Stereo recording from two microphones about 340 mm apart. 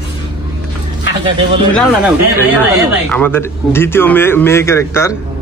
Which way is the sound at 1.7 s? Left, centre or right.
Centre.